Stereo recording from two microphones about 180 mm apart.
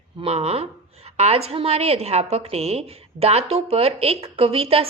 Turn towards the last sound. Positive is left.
turn(degrees=-30)  # may be behind; listen again after turning